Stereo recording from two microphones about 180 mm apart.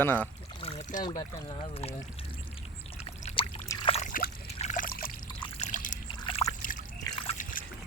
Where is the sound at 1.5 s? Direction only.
35° left (ahead or behind).